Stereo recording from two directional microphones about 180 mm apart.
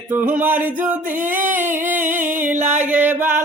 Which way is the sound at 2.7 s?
10° right (ahead or behind).